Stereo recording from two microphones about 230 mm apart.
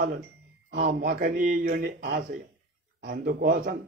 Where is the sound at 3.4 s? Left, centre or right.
Right.